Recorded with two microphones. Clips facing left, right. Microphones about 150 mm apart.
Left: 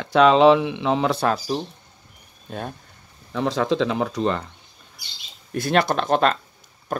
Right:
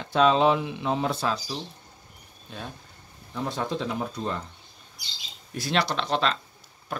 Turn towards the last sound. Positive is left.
turn(degrees=45)  # may be behind; listen again after turning